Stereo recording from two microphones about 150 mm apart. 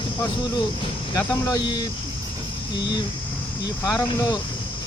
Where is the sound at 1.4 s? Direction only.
25° left (ahead or behind).